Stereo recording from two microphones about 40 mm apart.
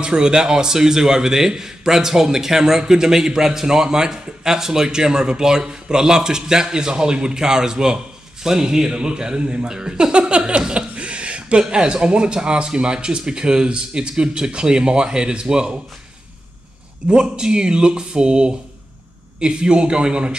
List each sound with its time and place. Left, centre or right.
0.0 s a man's voice: right
11.0 s a sound: right
11.7 s speech: right
17.1 s speech: right